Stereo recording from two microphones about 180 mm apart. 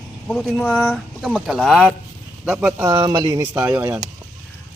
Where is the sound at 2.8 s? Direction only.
20° right (ahead or behind).